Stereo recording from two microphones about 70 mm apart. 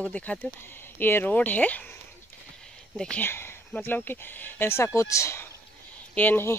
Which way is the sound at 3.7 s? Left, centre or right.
Left.